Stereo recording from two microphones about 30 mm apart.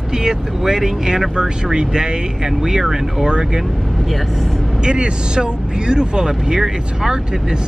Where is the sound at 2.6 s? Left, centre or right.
Centre.